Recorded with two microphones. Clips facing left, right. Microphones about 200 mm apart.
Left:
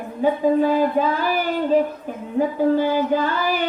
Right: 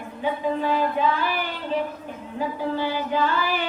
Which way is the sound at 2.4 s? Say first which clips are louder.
Left 8 dB; 50° left (ahead or behind).